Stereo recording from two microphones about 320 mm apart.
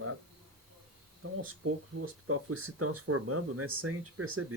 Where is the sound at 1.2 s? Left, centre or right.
Right.